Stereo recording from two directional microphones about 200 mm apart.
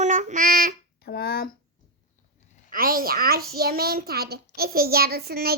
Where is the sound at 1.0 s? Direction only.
50° left (ahead or behind).